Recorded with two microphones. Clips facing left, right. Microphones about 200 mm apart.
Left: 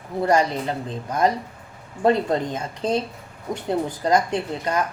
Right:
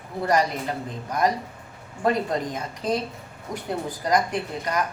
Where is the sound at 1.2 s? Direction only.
25° left (ahead or behind).